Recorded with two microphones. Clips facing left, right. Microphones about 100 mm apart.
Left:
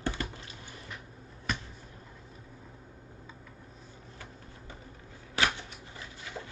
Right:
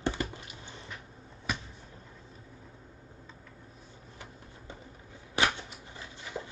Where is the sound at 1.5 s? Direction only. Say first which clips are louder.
Even; 5° right (ahead or behind).